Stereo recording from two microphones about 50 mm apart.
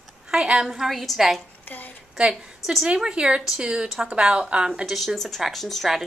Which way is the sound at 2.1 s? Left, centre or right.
Centre.